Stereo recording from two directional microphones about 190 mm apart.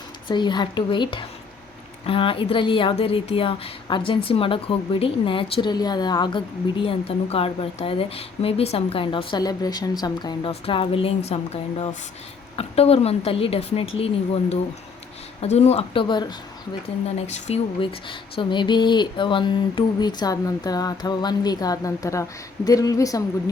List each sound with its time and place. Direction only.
0.3 s a woman's voice: 25° left (ahead or behind)
15.4 s a woman's voice: 35° left (ahead or behind)
17.2 s speech: 35° left (ahead or behind); by 23.2 s 20° left (ahead or behind)